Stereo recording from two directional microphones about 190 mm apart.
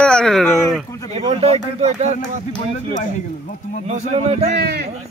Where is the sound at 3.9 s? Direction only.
35° right (ahead or behind).